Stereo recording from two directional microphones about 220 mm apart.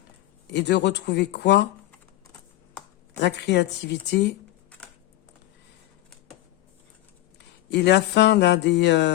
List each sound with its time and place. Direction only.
0.5 s speech: 50° left (ahead or behind)
3.2 s speech: 50° left (ahead or behind)
7.7 s speech: 50° left (ahead or behind)